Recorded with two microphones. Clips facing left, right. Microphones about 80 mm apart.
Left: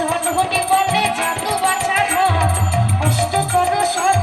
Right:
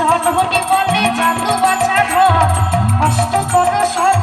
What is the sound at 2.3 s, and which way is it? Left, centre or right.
Music, right.